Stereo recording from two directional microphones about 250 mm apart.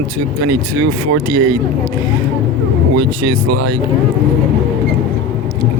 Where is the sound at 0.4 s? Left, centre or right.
Right.